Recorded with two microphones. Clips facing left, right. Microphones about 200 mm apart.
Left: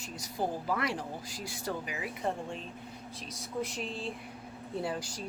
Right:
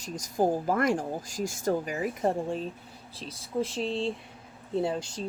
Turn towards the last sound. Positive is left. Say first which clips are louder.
# right 6 dB
turn(degrees=-25)  # may be behind; listen again after turning